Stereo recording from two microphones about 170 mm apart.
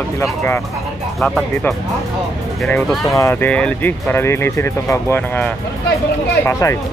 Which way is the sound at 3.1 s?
15° left (ahead or behind).